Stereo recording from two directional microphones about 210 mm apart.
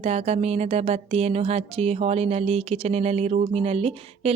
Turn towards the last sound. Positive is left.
turn(degrees=-30)  # may be behind; listen again after turning